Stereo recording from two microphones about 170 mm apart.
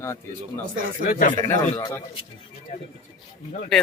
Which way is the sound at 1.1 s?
55° left (ahead or behind).